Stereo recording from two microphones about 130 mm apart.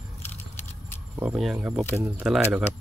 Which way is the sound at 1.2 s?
5° right (ahead or behind).